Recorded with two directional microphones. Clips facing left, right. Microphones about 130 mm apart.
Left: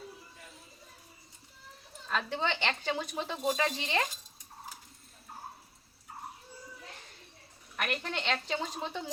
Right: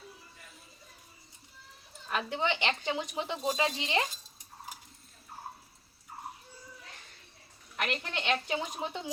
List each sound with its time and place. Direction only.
2.0 s speech: 15° right (ahead or behind)
7.9 s speech: 10° right (ahead or behind)